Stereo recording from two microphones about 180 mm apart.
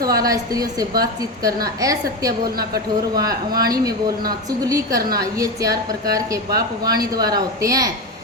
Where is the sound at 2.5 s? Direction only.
55° right (ahead or behind).